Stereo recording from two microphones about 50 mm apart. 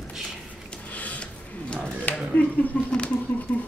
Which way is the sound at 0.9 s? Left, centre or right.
Left.